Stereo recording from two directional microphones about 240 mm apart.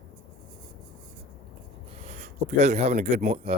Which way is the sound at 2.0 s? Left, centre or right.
Right.